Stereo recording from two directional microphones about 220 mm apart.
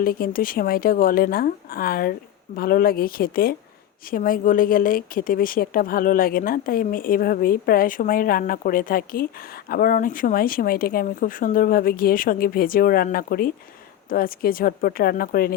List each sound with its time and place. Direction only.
0.0 s speech: 40° left (ahead or behind)